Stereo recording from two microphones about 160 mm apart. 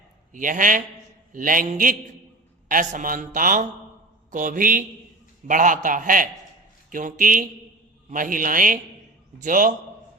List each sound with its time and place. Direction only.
0.3 s a man's voice: 55° right (ahead or behind)